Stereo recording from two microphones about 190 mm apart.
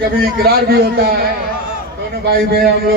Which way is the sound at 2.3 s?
55° right (ahead or behind).